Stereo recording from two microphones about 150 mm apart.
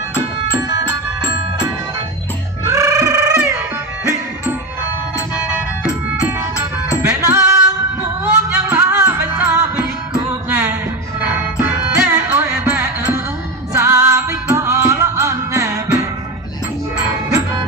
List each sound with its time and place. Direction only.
0.5 s music: 25° right (ahead or behind)
2.6 s music: 20° right (ahead or behind)
6.6 s music: 20° right (ahead or behind)
11.9 s music: 15° right (ahead or behind)